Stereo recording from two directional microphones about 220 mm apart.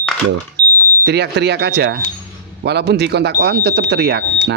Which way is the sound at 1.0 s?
50° right (ahead or behind).